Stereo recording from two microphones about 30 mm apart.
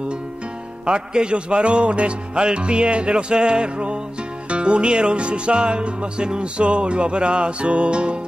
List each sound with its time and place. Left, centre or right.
0.8 s music: right